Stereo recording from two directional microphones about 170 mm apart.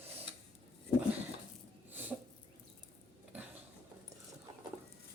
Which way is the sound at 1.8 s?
10° right (ahead or behind).